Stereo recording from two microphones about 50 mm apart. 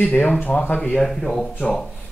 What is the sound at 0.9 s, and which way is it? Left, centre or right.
Speech, centre.